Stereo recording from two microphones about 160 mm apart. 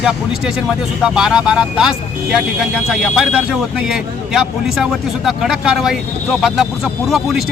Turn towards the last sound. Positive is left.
turn(degrees=-5)  # may be behind; listen again after turning